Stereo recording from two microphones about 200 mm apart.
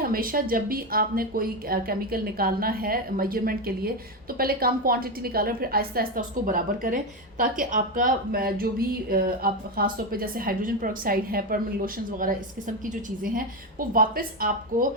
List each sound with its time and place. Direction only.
0.0 s a woman's voice: 45° right (ahead or behind)